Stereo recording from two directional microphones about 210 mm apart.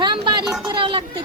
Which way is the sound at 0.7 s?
25° right (ahead or behind).